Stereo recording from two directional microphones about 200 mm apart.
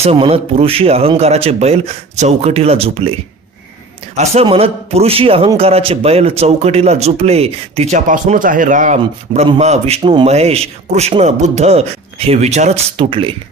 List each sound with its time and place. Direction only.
0.0 s speech: 30° right (ahead or behind)
4.2 s a man's voice: 30° right (ahead or behind)